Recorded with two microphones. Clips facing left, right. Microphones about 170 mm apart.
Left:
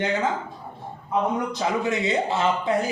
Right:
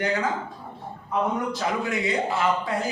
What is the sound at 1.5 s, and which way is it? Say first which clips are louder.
Speech: left 2 dB; 25° left (ahead or behind).